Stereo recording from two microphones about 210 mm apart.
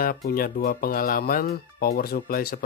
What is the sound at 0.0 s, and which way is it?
Speech, 45° left (ahead or behind).